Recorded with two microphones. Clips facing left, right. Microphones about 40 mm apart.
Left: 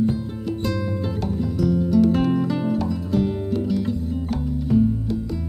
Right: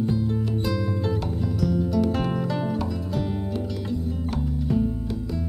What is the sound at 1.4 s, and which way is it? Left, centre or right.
Music, centre.